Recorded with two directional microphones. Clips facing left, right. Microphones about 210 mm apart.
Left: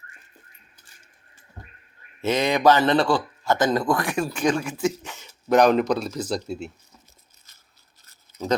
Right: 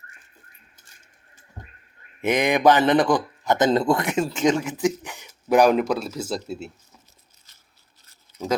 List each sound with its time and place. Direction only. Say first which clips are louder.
2.2 s speech: right 1 dB; 15° right (ahead or behind)